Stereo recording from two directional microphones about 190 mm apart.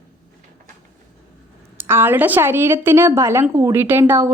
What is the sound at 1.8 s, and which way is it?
A woman's voice, 10° right (ahead or behind).